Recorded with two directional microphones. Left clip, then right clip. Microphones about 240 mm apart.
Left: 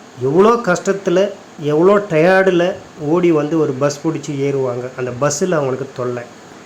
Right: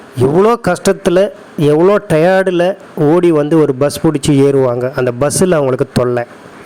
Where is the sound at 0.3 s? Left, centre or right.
Right.